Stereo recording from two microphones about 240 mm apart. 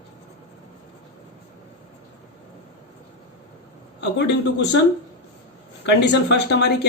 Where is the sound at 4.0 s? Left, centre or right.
Left.